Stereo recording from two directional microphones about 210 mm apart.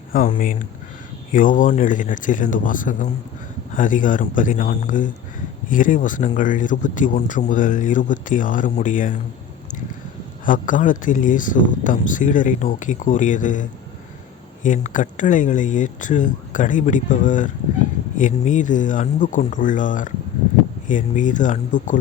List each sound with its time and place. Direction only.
0.1 s speech: 40° left (ahead or behind)
10.4 s speech: 40° left (ahead or behind)